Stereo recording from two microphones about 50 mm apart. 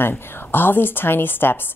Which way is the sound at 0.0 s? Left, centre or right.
Left.